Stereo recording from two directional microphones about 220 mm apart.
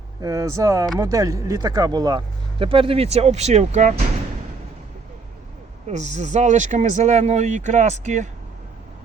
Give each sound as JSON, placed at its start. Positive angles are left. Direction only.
{"t": 0.2, "sound": "speech", "side_deg": -15}
{"t": 5.9, "sound": "speech", "side_deg": -30}